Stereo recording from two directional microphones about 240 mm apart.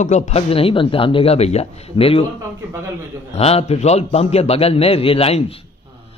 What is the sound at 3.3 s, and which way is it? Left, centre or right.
A man's voice, left.